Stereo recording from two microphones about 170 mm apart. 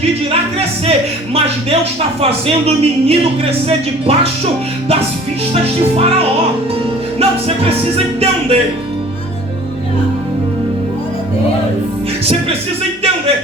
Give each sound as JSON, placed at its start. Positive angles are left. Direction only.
{"t": 2.5, "sound": "speech", "side_deg": -35}
{"t": 6.0, "sound": "speech", "side_deg": -35}